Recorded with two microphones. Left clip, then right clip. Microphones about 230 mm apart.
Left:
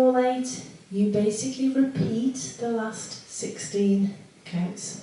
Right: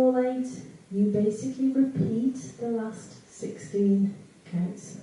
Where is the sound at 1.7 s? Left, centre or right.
Centre.